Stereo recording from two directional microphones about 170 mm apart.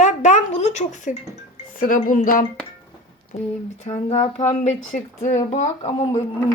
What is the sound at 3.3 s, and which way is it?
Speech, 40° left (ahead or behind).